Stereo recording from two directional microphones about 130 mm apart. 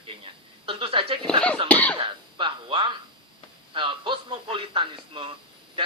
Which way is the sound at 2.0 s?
40° right (ahead or behind).